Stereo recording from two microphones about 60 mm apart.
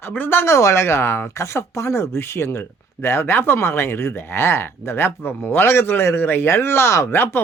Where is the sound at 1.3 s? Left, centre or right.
Left.